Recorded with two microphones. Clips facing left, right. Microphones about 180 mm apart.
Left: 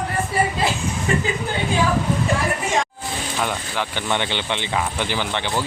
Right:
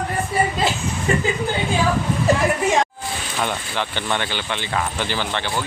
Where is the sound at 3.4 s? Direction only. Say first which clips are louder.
Right 1 dB; 5° left (ahead or behind).